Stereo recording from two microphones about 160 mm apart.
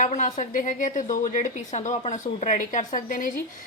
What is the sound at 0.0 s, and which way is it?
A woman's voice, 50° left (ahead or behind).